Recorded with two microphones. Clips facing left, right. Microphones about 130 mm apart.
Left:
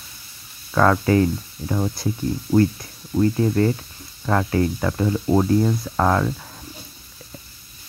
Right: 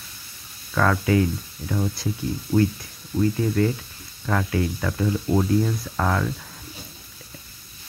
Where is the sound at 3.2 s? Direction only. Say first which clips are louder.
Left 3 dB; 40° left (ahead or behind).